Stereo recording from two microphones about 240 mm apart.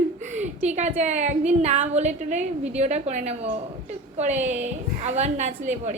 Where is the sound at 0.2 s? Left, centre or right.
Right.